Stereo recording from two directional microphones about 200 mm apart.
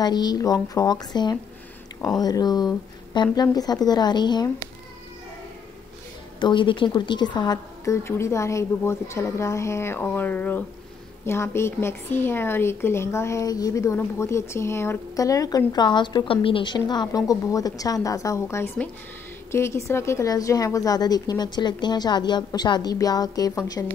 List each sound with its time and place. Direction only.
0.0 s a woman's voice: 20° left (ahead or behind)
6.4 s a woman's voice: 25° left (ahead or behind)